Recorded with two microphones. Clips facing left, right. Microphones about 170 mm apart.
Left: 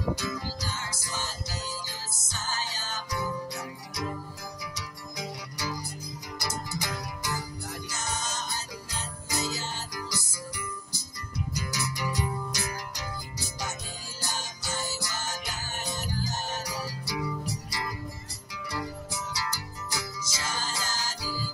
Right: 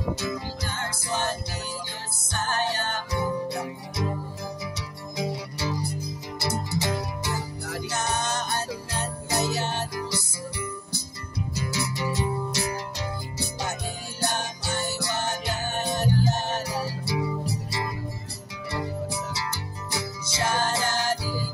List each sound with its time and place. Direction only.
0.1 s music: 25° right (ahead or behind)
0.6 s music: 60° right (ahead or behind)
3.1 s music: 25° right (ahead or behind)
4.7 s music: 25° right (ahead or behind)
7.6 s music: 65° right (ahead or behind)
11.5 s music: 25° right (ahead or behind)
14.2 s music: 60° right (ahead or behind)
16.6 s music: 25° right (ahead or behind)
19.3 s music: 25° right (ahead or behind)
20.3 s music: 60° right (ahead or behind)
21.2 s music: 25° right (ahead or behind)